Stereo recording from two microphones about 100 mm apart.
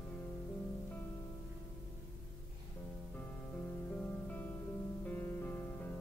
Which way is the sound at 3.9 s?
15° left (ahead or behind).